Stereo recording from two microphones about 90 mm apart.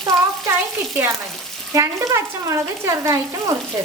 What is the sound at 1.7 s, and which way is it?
Speech, 35° right (ahead or behind).